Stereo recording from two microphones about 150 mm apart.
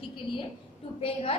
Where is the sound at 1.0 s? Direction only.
40° left (ahead or behind).